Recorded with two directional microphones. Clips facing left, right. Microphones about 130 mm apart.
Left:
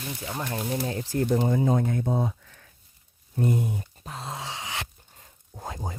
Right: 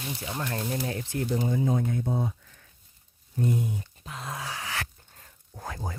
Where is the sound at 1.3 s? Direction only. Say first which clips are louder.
Left 3 dB; 65° left (ahead or behind); by 2.6 s 80° left.